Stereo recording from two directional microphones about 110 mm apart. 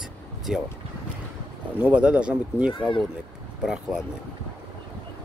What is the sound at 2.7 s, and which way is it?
Speech, 45° left (ahead or behind).